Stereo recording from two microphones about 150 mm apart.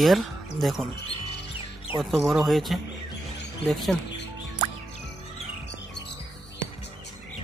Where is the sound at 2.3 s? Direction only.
Centre (ahead or behind).